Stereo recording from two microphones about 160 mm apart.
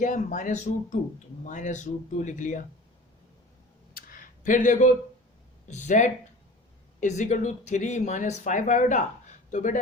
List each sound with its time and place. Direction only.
0.0 s speech: 50° left (ahead or behind)
3.9 s a sound: 60° left (ahead or behind)
5.6 s speech: 50° left (ahead or behind)